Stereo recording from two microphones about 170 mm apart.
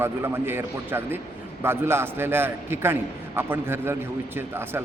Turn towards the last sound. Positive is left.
turn(degrees=-15)  # may be behind; listen again after turning